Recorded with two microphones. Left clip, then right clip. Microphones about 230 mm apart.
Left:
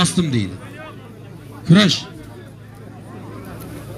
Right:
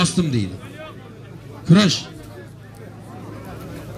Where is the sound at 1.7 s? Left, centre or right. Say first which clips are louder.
Left 2 dB; left.